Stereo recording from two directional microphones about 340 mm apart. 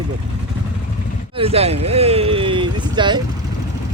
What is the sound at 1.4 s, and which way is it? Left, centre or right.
Speech, centre.